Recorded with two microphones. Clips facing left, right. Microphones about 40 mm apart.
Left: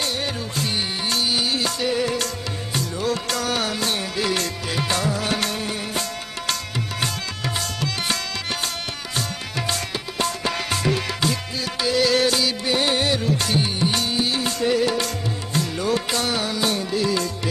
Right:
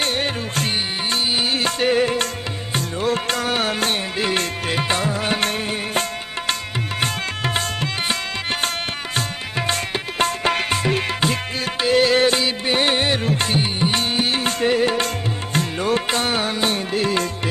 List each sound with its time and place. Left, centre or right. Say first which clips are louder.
0.0 s music: right 4 dB; right
7.0 s tabla: right 6 dB; right
9.6 s music: right 4 dB; right
14.1 s music: right 2 dB; right